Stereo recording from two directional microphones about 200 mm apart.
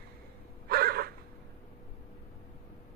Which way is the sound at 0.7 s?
50° right (ahead or behind).